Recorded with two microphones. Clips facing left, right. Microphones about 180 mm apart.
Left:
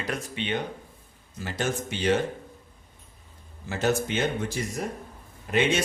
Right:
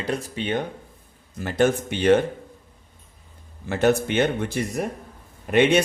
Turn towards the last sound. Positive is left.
turn(degrees=-60)  # may be behind; listen again after turning